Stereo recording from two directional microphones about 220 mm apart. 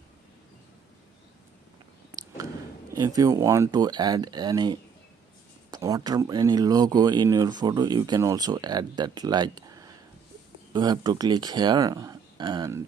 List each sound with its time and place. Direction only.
2.9 s speech: 15° right (ahead or behind)